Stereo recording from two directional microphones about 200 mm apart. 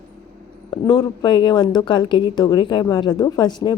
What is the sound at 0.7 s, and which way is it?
Speech, 25° left (ahead or behind).